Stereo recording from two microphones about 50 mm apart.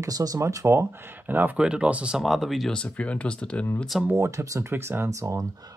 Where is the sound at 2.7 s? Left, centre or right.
Left.